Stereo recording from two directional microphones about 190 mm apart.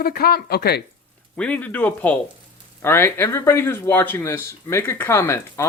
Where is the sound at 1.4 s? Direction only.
10° left (ahead or behind).